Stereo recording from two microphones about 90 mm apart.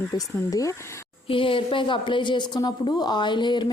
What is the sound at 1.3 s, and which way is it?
Speech, 75° left (ahead or behind).